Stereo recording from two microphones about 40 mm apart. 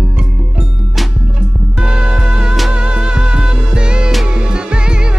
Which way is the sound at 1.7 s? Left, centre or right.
Right.